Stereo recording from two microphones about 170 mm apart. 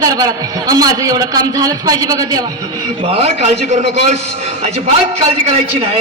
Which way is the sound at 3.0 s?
35° right (ahead or behind).